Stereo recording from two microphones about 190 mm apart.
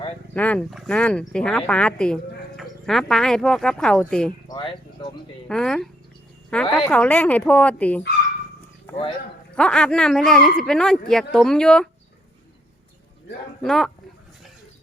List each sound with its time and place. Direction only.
0.3 s speech: 5° left (ahead or behind)
4.4 s a sound: 25° left (ahead or behind)
5.5 s speech: 5° left (ahead or behind)
9.6 s speech: 5° left (ahead or behind)
13.6 s speech: centre (ahead or behind)